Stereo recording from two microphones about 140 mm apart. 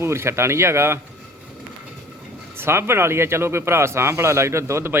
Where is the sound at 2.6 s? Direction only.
15° right (ahead or behind).